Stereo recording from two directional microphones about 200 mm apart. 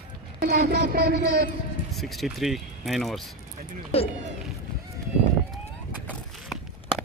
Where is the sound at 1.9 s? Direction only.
Centre (ahead or behind).